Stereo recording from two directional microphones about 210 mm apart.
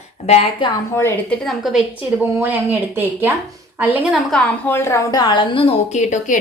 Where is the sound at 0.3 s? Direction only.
30° left (ahead or behind).